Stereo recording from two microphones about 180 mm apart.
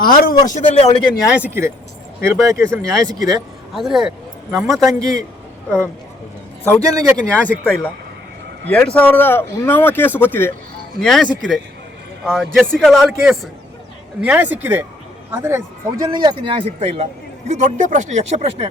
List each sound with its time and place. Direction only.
0.0 s speech: 50° left (ahead or behind); by 1.0 s 35° left (ahead or behind)
1.4 s speech: 15° right (ahead or behind)
3.8 s a man's voice: centre (ahead or behind)
4.8 s speech: 20° right (ahead or behind)
6.8 s speech: 15° right (ahead or behind)
7.3 s a man's voice: 10° left (ahead or behind); by 17.1 s 30° right (ahead or behind)
17.5 s speech: 40° right (ahead or behind)